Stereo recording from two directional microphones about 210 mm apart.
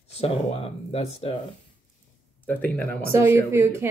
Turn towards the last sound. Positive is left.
turn(degrees=-10)  # may be behind; listen again after turning